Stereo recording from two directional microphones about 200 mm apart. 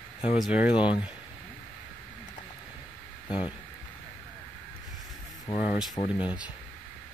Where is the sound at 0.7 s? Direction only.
25° left (ahead or behind).